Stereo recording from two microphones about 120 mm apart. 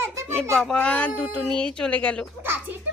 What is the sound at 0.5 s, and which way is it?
A woman's voice, 10° left (ahead or behind).